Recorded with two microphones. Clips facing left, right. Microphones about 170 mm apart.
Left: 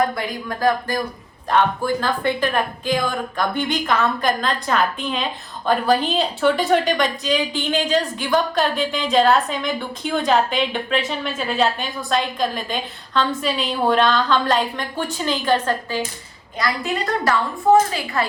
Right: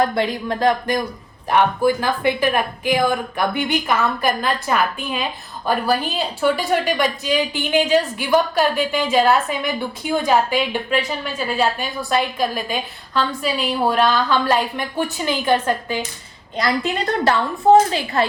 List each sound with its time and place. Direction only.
0.0 s a woman's voice: 25° right (ahead or behind)
16.6 s a woman's voice: 25° right (ahead or behind)